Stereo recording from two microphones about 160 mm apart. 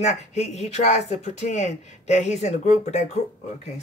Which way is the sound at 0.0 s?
45° left (ahead or behind).